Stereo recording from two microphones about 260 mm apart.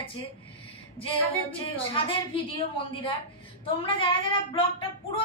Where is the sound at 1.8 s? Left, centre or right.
Left.